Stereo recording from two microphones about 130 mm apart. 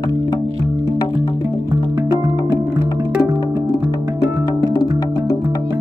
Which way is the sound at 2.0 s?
30° right (ahead or behind).